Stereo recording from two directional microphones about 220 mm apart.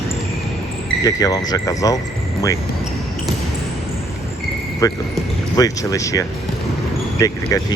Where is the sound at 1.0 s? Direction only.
15° left (ahead or behind).